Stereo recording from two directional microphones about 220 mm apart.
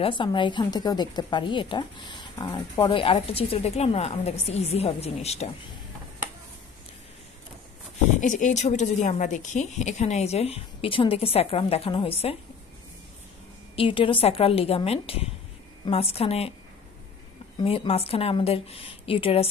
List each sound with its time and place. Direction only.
0.0 s speech: 20° left (ahead or behind)
8.0 s speech: 35° left (ahead or behind)
13.7 s speech: 25° left (ahead or behind)
17.6 s speech: 25° left (ahead or behind)